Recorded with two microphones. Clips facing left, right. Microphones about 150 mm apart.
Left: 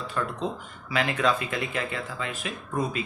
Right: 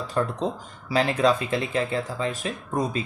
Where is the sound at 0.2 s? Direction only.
30° right (ahead or behind).